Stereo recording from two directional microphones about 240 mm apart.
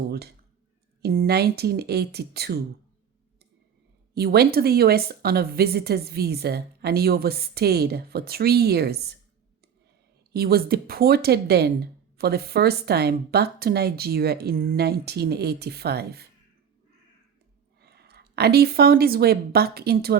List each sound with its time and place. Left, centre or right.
1.0 s speech: right
4.1 s speech: right
10.3 s speech: right
17.7 s speech: right